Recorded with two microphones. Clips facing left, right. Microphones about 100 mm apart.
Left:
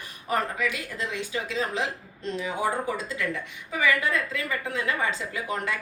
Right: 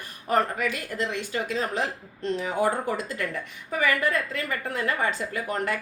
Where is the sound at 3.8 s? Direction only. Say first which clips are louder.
Even; 50° right (ahead or behind).